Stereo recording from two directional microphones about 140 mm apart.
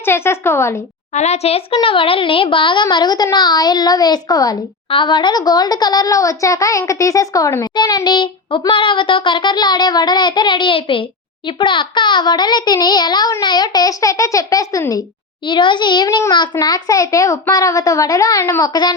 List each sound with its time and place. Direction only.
0.0 s speech: 15° left (ahead or behind)
1.1 s a child's voice: 55° left (ahead or behind); by 18.9 s 30° left (ahead or behind)